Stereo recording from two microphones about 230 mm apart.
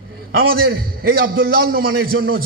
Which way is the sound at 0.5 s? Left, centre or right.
Right.